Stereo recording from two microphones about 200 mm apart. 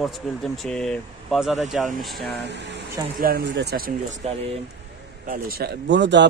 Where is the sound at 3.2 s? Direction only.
50° right (ahead or behind).